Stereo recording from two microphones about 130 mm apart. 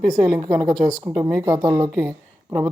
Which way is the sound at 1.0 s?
45° right (ahead or behind).